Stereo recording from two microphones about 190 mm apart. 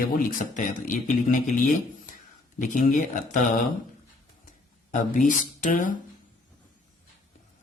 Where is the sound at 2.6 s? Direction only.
40° left (ahead or behind).